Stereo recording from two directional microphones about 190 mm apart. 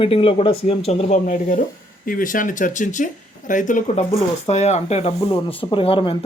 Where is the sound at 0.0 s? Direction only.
30° left (ahead or behind).